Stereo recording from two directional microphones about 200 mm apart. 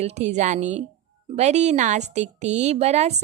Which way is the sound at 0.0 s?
35° right (ahead or behind).